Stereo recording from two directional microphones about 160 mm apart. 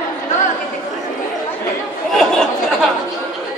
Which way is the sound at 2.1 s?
Centre (ahead or behind).